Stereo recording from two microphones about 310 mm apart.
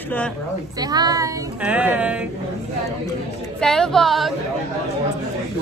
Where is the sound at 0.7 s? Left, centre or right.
Centre.